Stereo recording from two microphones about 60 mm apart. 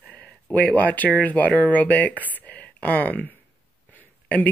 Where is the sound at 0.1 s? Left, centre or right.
Left.